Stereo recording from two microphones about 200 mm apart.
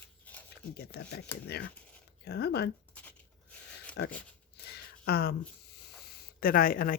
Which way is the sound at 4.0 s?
60° left (ahead or behind).